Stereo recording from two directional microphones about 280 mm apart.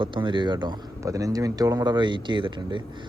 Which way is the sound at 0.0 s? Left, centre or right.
Centre.